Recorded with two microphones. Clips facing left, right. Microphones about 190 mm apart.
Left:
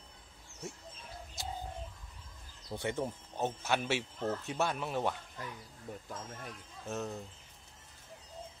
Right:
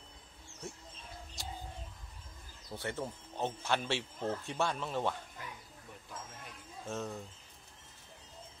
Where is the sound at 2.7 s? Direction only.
20° left (ahead or behind).